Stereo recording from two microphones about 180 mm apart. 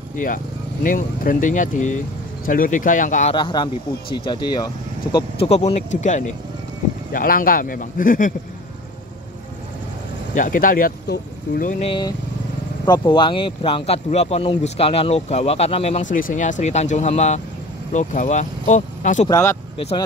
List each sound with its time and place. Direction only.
0.1 s speech: 50° left (ahead or behind)
3.3 s speech: 25° left (ahead or behind); by 6.3 s 40° left (ahead or behind)
7.1 s speech: 50° left (ahead or behind)
10.3 s speech: 45° left (ahead or behind)
11.8 s speech: 25° left (ahead or behind)
19.2 s speech: 15° left (ahead or behind)